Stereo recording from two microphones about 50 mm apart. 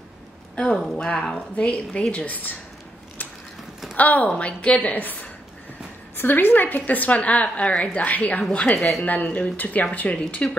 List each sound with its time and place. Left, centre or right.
0.6 s a woman's voice: centre; by 2.5 s left
3.9 s a woman's voice: left
8.7 s speech: centre
9.0 s a woman's voice: left